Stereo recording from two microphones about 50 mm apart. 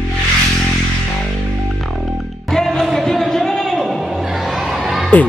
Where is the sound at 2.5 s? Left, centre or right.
Centre.